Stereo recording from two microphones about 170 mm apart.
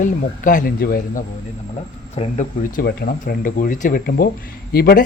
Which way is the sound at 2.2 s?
35° left (ahead or behind).